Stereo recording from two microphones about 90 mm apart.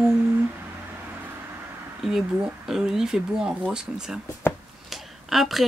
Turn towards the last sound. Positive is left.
turn(degrees=0)  # may be behind; listen again after turning